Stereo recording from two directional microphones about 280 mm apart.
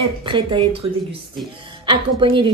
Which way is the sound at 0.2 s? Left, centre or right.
Centre.